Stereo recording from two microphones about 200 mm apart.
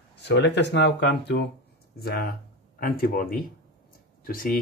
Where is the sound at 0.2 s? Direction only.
60° left (ahead or behind).